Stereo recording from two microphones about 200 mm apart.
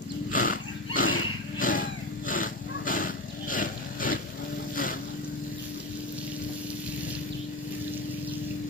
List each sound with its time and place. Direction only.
0.3 s wild animals: 45° left (ahead or behind)